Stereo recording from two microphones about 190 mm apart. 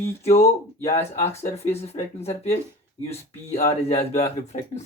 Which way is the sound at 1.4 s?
35° left (ahead or behind).